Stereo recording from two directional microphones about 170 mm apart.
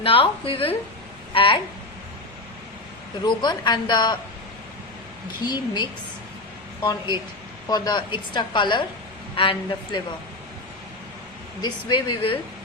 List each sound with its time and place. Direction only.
0.0 s speech: 35° left (ahead or behind)
3.2 s a woman's voice: 25° left (ahead or behind)
5.5 s a woman's voice: 25° left (ahead or behind)
7.7 s a woman's voice: 25° left (ahead or behind)
11.6 s speech: 30° left (ahead or behind)